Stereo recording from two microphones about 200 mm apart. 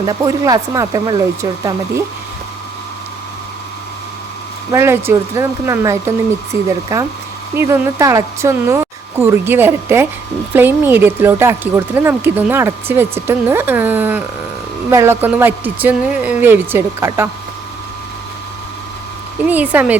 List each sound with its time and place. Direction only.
0.0 s speech: 20° right (ahead or behind)
4.7 s speech: 15° right (ahead or behind)
19.5 s speech: 10° right (ahead or behind)